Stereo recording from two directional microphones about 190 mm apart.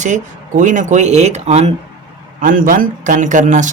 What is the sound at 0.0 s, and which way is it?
Speech, 40° right (ahead or behind).